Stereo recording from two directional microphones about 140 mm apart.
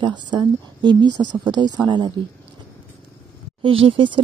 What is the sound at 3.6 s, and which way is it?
Speech, 40° right (ahead or behind).